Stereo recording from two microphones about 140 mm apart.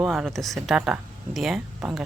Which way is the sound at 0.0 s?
Centre (ahead or behind).